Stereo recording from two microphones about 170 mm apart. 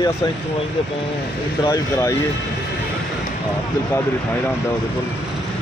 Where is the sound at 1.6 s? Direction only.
15° left (ahead or behind).